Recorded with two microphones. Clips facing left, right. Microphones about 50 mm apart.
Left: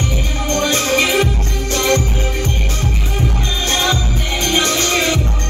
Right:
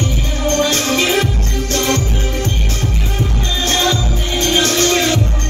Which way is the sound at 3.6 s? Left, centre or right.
Left.